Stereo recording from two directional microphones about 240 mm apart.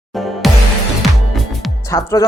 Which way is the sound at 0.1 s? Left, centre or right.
Centre.